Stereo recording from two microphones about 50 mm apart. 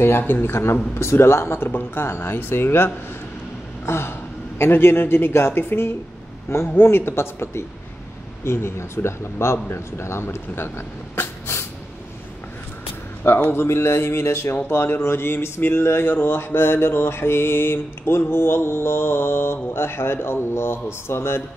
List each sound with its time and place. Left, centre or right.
0.2 s mantra: left
0.9 s speech: left
2.0 s speech: left
2.3 s mantra: left
3.8 s speech: left
4.6 s mantra: left
6.5 s speech: left
6.8 s mantra: left
8.5 s speech: left
11.1 s a sound: left
13.4 s speech: left
16.3 s mantra: left